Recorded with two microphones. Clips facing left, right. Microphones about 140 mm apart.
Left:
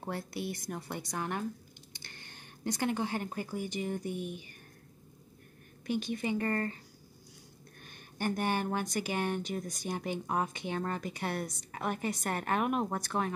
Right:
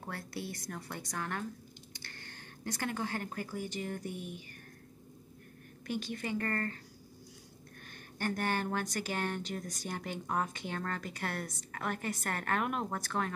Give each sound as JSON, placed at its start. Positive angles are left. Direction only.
{"t": 0.0, "sound": "speech", "side_deg": 20}
{"t": 5.9, "sound": "speech", "side_deg": 15}
{"t": 8.2, "sound": "speech", "side_deg": 15}